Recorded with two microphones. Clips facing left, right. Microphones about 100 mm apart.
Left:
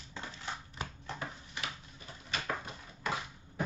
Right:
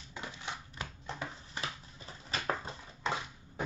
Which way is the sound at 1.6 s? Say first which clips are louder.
Right 2 dB; 35° right (ahead or behind).